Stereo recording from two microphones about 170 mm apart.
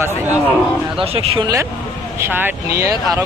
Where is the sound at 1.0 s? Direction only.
30° right (ahead or behind).